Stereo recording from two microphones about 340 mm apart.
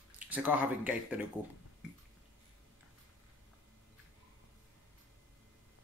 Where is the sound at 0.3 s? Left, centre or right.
Centre.